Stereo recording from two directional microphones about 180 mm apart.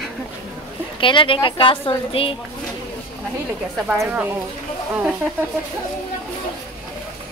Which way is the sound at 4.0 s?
10° right (ahead or behind).